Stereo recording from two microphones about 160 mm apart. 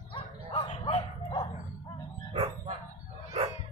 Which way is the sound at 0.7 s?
45° left (ahead or behind).